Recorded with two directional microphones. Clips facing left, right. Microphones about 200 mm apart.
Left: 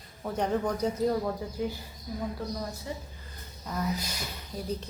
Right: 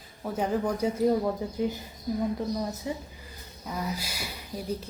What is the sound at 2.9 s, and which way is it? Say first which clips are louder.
A woman's voice: right 4 dB; 15° right (ahead or behind).